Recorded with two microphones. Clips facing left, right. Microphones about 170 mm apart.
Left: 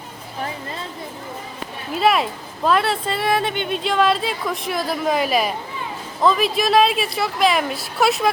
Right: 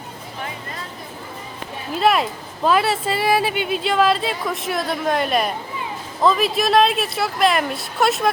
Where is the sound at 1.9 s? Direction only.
Centre (ahead or behind).